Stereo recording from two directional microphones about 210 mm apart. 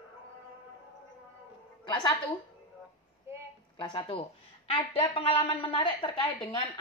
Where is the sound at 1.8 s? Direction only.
20° left (ahead or behind).